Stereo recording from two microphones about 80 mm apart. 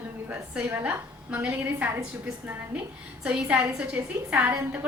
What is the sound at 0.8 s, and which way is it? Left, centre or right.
A woman's voice, centre.